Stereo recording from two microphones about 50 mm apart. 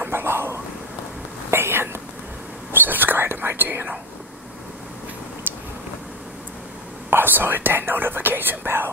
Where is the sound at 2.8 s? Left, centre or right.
Right.